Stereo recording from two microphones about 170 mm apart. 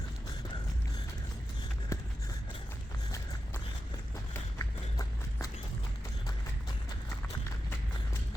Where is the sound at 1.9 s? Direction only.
20° left (ahead or behind).